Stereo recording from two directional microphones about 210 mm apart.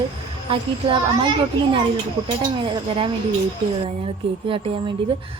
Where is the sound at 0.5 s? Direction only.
25° right (ahead or behind).